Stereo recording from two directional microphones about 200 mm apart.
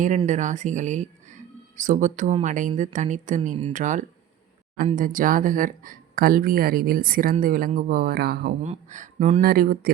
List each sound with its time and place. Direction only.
0.3 s speech: 40° right (ahead or behind)
8.6 s speech: 35° right (ahead or behind)